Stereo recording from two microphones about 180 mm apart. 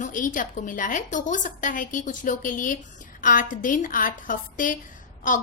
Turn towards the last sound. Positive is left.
turn(degrees=45)  # may be behind; listen again after turning